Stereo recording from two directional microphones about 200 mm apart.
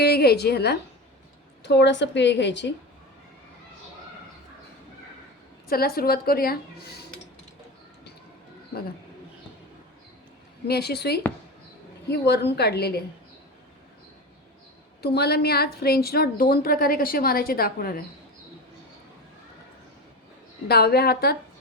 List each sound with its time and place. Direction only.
0.0 s a woman's voice: 50° left (ahead or behind)
5.6 s a woman's voice: 50° left (ahead or behind)
10.7 s a woman's voice: 55° left (ahead or behind)
15.0 s a woman's voice: 55° left (ahead or behind)
20.7 s a woman's voice: 50° left (ahead or behind)